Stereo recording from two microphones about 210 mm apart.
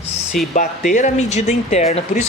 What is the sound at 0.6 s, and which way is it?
Speech, 40° left (ahead or behind).